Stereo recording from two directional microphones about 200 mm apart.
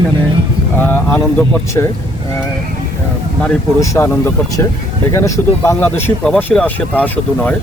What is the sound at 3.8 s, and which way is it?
Speech, 10° left (ahead or behind).